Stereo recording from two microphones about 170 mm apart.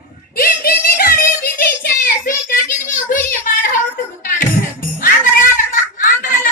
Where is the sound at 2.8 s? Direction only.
55° left (ahead or behind).